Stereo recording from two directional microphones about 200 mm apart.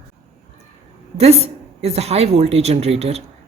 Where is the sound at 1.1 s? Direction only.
30° right (ahead or behind).